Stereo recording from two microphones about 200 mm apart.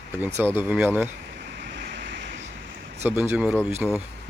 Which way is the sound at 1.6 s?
60° right (ahead or behind).